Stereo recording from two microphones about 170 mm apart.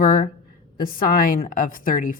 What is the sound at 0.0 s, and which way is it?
A woman's voice, 55° left (ahead or behind).